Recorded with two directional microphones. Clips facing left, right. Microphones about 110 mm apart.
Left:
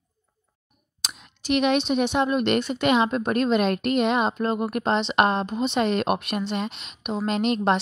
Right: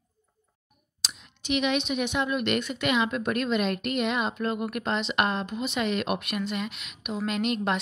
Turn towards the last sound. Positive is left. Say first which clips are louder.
# left 5 dB
turn(degrees=35)  # may be behind; listen again after turning